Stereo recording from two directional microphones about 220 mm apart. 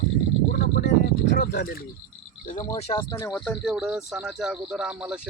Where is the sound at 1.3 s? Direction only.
45° left (ahead or behind).